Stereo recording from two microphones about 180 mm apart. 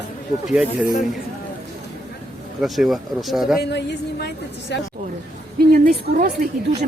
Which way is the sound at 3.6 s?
65° left (ahead or behind).